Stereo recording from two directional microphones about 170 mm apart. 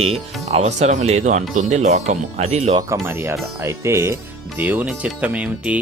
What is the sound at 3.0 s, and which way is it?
Speech, 15° right (ahead or behind).